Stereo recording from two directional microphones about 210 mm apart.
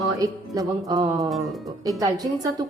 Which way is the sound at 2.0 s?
15° right (ahead or behind).